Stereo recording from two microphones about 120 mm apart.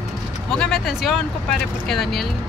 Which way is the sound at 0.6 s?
5° left (ahead or behind).